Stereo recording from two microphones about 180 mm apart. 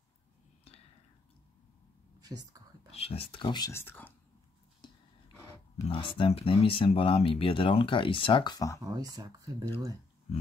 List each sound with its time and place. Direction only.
2.2 s speech: 20° right (ahead or behind)
2.9 s speech: 35° left (ahead or behind); by 4.1 s 10° left (ahead or behind)
5.9 s speech: 30° left (ahead or behind)
8.8 s speech: 20° right (ahead or behind)